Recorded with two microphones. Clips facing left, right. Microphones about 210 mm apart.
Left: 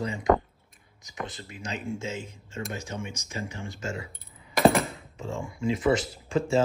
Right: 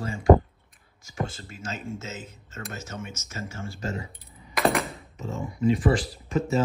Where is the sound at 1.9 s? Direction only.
10° left (ahead or behind).